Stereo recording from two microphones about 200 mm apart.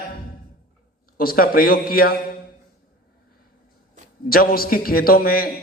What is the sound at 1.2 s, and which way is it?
Speech, 45° left (ahead or behind).